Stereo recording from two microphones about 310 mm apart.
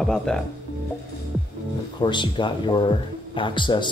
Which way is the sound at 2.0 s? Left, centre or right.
Centre.